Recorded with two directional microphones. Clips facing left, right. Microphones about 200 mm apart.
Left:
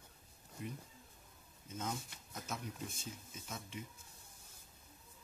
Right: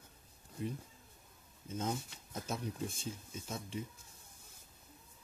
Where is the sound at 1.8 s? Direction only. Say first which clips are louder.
Right 4 dB; 30° right (ahead or behind).